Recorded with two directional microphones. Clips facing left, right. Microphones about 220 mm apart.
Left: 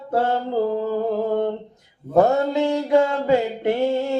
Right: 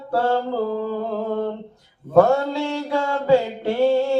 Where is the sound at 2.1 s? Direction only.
20° left (ahead or behind).